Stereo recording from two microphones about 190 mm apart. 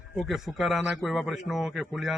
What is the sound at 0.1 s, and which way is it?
A man's voice, centre (ahead or behind).